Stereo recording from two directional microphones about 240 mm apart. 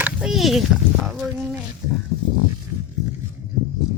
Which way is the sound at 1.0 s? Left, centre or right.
Centre.